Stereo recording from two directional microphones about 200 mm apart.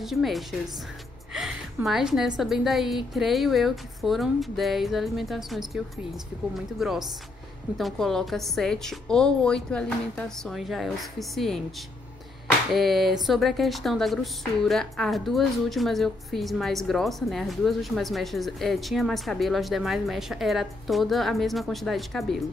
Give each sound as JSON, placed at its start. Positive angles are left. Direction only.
{"t": 0.0, "sound": "speech", "side_deg": 0}
{"t": 1.9, "sound": "speech", "side_deg": 0}
{"t": 12.7, "sound": "speech", "side_deg": 0}